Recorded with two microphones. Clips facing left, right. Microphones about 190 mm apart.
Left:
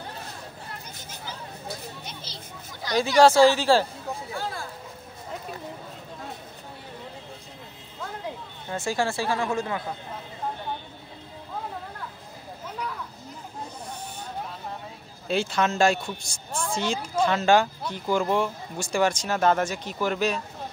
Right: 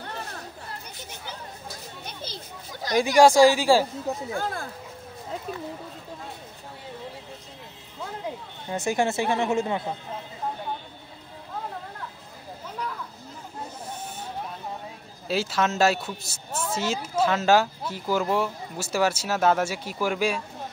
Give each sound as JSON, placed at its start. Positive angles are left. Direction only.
{"t": 2.9, "sound": "speech", "side_deg": -15}
{"t": 4.3, "sound": "speech", "side_deg": -50}
{"t": 8.6, "sound": "speech", "side_deg": -20}
{"t": 15.2, "sound": "speech", "side_deg": -5}